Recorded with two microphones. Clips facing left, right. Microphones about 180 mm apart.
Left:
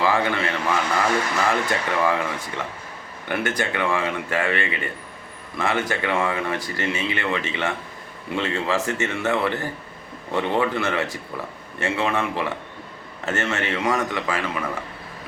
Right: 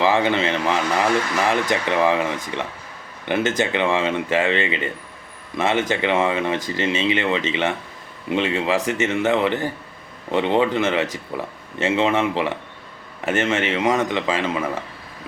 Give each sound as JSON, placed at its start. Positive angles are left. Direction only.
{"t": 0.0, "sound": "speech", "side_deg": -20}